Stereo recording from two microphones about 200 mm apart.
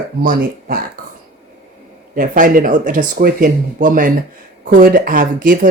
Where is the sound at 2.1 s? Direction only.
40° right (ahead or behind).